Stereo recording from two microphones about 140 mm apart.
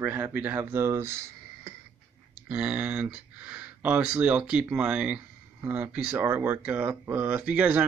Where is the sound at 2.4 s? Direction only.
10° right (ahead or behind).